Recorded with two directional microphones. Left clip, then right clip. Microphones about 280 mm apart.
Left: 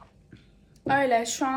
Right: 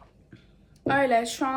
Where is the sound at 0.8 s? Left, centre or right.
Centre.